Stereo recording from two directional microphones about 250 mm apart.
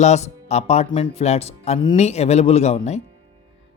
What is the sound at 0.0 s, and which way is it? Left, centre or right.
Speech, left.